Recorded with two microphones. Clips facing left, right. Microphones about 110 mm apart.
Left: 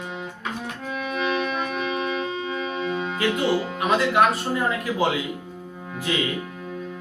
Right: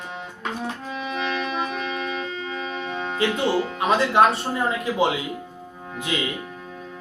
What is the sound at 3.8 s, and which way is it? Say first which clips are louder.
Speech: right 2 dB; 30° right (ahead or behind).